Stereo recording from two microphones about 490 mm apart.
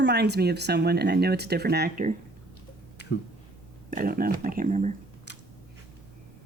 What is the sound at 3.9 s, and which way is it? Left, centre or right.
Speech, centre.